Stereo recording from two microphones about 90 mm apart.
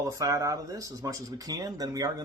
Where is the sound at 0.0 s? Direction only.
40° right (ahead or behind).